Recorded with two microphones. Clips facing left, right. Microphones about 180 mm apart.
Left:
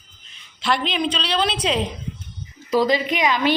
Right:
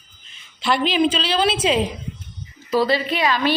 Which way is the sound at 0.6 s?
Centre (ahead or behind).